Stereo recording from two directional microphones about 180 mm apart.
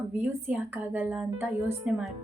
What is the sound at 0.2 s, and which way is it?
A woman's voice, 10° right (ahead or behind).